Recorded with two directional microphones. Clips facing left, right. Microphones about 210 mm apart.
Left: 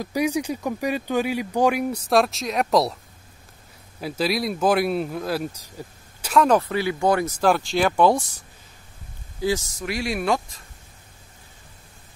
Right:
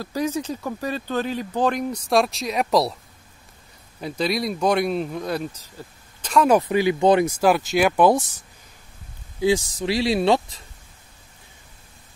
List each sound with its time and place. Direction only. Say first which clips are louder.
0.0 s speech: left 2 dB; 15° left (ahead or behind)
4.0 s speech: even; 5° left (ahead or behind)
6.3 s speech: right 1 dB; 5° right (ahead or behind)
6.6 s speech: right 4 dB; 15° right (ahead or behind)
7.3 s speech: right 2 dB; 10° right (ahead or behind)
9.8 s speech: right 5 dB; 30° right (ahead or behind)